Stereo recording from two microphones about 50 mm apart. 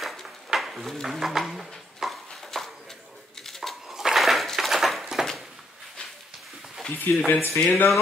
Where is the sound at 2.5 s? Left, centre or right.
Centre.